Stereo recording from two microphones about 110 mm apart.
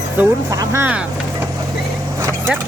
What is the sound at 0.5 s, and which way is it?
Speech, 30° right (ahead or behind).